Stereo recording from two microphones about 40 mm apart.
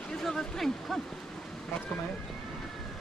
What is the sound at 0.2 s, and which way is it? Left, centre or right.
Speech, centre.